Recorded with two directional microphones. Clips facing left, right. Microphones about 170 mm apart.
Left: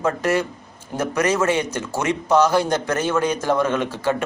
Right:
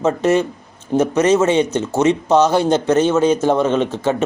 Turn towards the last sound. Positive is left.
turn(degrees=-20)  # may be behind; listen again after turning